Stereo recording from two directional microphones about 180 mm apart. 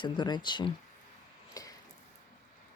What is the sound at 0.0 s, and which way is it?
Speech, 25° left (ahead or behind).